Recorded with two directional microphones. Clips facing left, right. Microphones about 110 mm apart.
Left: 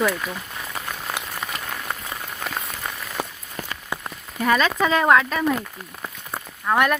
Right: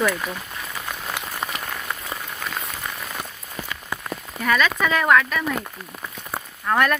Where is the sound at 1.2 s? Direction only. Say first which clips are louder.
Even; 15° left (ahead or behind).